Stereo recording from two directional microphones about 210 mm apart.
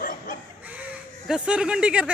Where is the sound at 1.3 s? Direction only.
5° right (ahead or behind).